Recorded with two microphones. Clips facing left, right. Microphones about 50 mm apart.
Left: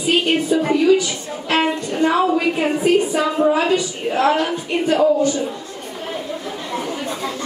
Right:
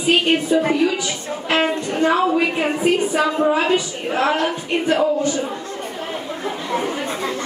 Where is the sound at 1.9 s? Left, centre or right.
Right.